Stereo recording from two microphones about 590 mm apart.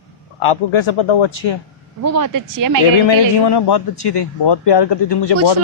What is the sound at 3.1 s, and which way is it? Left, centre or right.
A man's voice, left.